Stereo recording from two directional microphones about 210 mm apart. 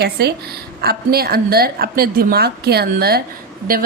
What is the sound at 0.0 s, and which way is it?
A woman's voice, 50° right (ahead or behind).